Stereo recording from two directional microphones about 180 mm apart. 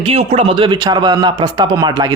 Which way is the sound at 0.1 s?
35° right (ahead or behind).